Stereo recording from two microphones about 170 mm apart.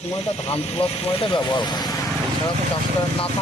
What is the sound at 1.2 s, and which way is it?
Speech, 25° left (ahead or behind).